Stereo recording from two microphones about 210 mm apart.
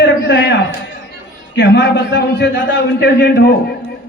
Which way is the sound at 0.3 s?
55° left (ahead or behind).